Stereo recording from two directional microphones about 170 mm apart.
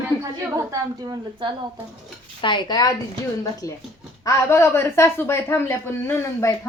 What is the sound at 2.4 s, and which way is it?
Speech, 30° left (ahead or behind).